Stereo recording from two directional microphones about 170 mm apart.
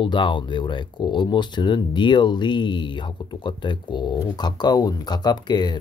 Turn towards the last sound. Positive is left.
turn(degrees=25)  # may be behind; listen again after turning